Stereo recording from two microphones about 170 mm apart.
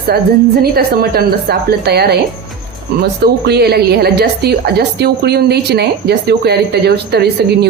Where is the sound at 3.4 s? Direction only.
70° right (ahead or behind).